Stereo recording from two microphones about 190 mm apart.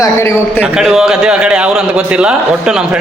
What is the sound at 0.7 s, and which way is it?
A man's voice, centre (ahead or behind).